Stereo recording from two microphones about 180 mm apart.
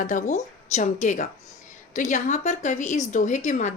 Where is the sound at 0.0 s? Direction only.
45° left (ahead or behind).